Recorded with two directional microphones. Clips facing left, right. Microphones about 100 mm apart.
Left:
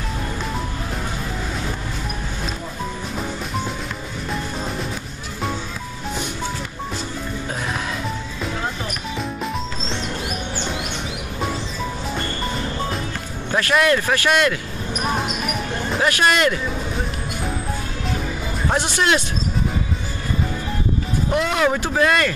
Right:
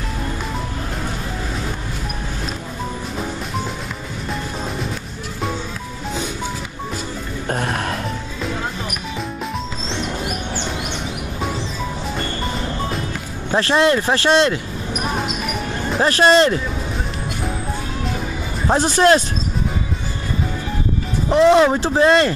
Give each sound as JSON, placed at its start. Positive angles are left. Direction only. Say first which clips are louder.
{"t": 7.4, "sound": "music", "louder": "right 7 dB", "side_deg": -55}
{"t": 13.6, "sound": "speech", "louder": "right 2 dB", "side_deg": -30}
{"t": 15.1, "sound": "music", "louder": "right 1 dB", "side_deg": 0}
{"t": 16.0, "sound": "speech", "louder": "right 5 dB", "side_deg": -30}
{"t": 18.7, "sound": "speech", "louder": "right 6 dB", "side_deg": -35}
{"t": 21.3, "sound": "speech", "louder": "right 8 dB", "side_deg": -30}